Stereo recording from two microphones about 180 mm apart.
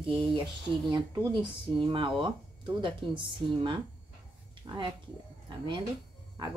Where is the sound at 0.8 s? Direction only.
20° right (ahead or behind).